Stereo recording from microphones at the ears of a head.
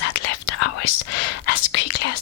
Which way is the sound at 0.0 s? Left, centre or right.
Left.